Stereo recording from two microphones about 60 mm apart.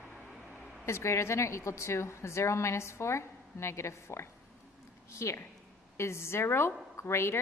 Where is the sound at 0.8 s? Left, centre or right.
Left.